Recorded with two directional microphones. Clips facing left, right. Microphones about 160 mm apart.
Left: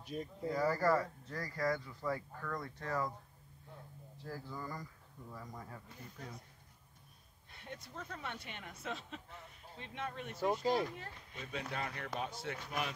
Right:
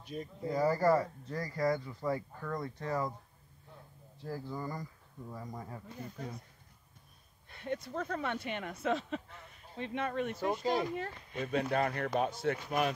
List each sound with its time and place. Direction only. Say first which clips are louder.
0.0 s speech: right 1 dB; centre (ahead or behind)
0.5 s speech: right 4 dB; 25° right (ahead or behind)
4.3 s speech: right 5 dB; 25° right (ahead or behind)
7.5 s speech: right 12 dB; 70° right (ahead or behind)
10.4 s speech: left 2 dB; 5° right (ahead or behind)
10.7 s speech: right 3 dB; 75° right (ahead or behind); by 12.5 s 55° right (ahead or behind)